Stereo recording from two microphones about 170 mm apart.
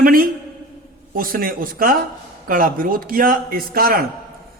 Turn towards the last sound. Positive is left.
turn(degrees=-60)  # may be behind; listen again after turning